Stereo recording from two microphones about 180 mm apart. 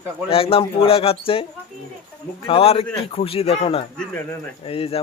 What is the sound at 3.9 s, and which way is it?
Speech, 10° left (ahead or behind).